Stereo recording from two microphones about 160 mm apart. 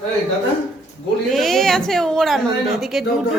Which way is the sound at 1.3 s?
Centre (ahead or behind).